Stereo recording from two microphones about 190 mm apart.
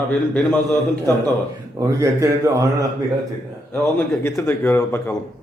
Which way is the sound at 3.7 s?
10° left (ahead or behind).